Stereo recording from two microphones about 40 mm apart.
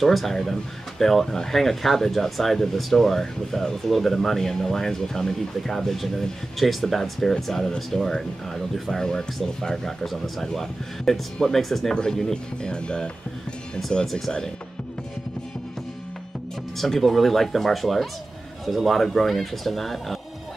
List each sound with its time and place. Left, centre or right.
0.0 s speech: centre
16.7 s speech: centre